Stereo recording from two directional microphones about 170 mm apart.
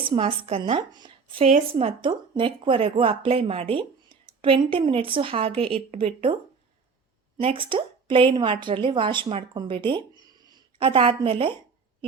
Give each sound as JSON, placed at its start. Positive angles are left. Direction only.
{"t": 0.0, "sound": "a woman's voice", "side_deg": -35}
{"t": 7.4, "sound": "a woman's voice", "side_deg": -30}